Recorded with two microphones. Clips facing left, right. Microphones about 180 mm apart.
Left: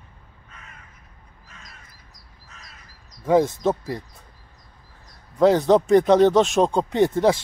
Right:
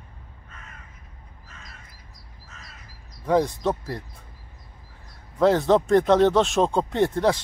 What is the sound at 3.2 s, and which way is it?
Speech, 5° left (ahead or behind).